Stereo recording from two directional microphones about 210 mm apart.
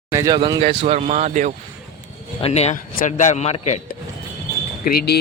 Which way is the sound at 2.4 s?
30° left (ahead or behind).